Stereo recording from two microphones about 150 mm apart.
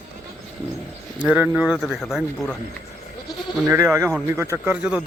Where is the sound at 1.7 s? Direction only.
5° left (ahead or behind).